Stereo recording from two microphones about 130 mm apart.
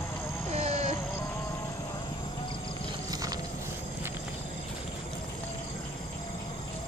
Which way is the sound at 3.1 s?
30° right (ahead or behind).